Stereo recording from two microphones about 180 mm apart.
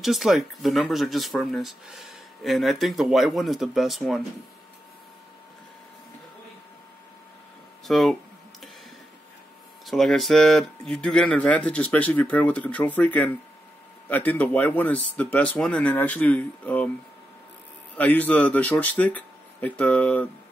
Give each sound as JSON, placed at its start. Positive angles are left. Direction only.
{"t": 0.0, "sound": "speech", "side_deg": 0}
{"t": 7.8, "sound": "a sound", "side_deg": 0}
{"t": 9.8, "sound": "speech", "side_deg": 0}
{"t": 17.9, "sound": "speech", "side_deg": 10}